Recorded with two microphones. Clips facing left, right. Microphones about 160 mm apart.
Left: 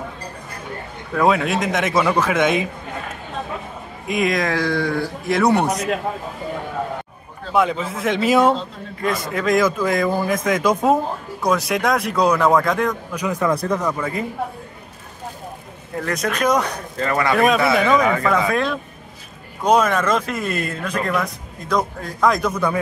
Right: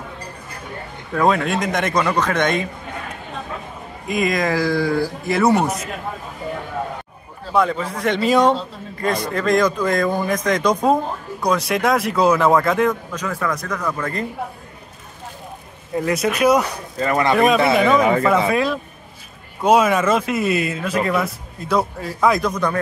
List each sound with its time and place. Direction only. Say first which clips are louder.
1.1 s a man's voice: even; centre (ahead or behind)
4.1 s a man's voice: even; centre (ahead or behind)
7.5 s a man's voice: even; centre (ahead or behind)
13.1 s a man's voice: left 3 dB; 15° left (ahead or behind)
13.8 s speech: left 1 dB; 10° left (ahead or behind)
16.0 s speech: right 3 dB; 10° right (ahead or behind)
17.7 s a man's voice: right 2 dB; centre (ahead or behind)
22.5 s speech: even; 5° left (ahead or behind)